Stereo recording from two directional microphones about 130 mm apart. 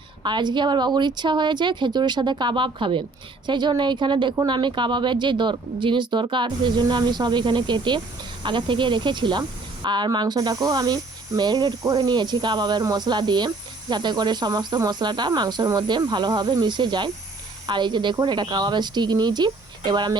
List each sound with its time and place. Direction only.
0.2 s speech: 35° right (ahead or behind)